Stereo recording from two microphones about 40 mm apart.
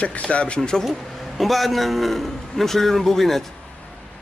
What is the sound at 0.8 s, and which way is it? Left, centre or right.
A man's voice, centre.